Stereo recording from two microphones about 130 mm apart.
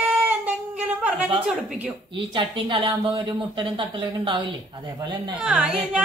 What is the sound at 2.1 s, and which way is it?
Speech, 40° right (ahead or behind).